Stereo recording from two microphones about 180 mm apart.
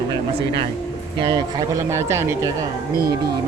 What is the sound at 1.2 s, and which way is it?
Speech, 25° right (ahead or behind).